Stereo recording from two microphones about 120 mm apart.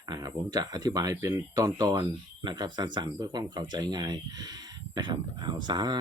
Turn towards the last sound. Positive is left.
turn(degrees=-35)  # may be behind; listen again after turning